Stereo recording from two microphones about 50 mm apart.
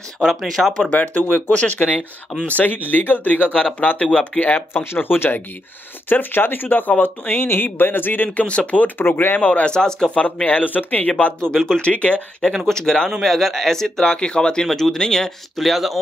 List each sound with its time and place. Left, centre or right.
0.2 s speech: centre
0.8 s speech: left
4.7 s speech: left
8.5 s speech: left
8.8 s speech: left
9.5 s speech: left
9.8 s speech: centre
10.2 s speech: left
11.4 s speech: centre
12.6 s speech: centre
13.2 s speech: centre
14.7 s speech: centre